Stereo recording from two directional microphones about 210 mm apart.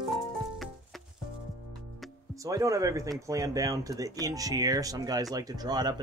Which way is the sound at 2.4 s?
15° right (ahead or behind).